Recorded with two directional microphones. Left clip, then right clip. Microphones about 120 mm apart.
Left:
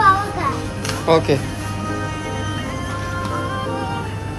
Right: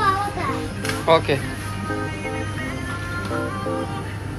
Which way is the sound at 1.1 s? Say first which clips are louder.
Left 2 dB; 25° left (ahead or behind).